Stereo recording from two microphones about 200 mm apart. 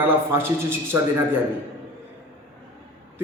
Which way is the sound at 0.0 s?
10° right (ahead or behind).